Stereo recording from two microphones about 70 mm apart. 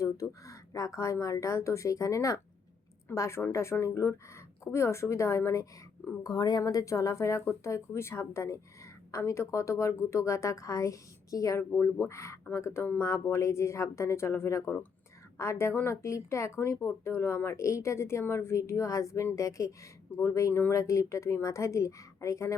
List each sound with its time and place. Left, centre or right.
0.0 s speech: left
6.2 s speech: left
16.0 s speech: left
20.5 s speech: left
20.7 s speech: left